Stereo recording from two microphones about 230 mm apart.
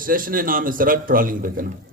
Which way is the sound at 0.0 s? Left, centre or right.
Right.